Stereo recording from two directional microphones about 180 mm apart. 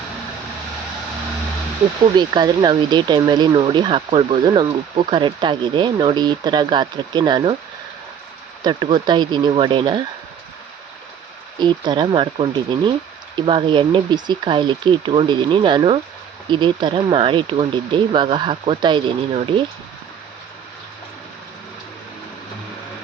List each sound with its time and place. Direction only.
2.1 s speech: 25° right (ahead or behind)
8.6 s speech: 25° right (ahead or behind)
11.6 s speech: 25° right (ahead or behind)